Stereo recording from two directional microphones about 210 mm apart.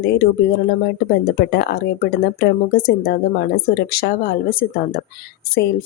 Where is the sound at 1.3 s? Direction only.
50° left (ahead or behind).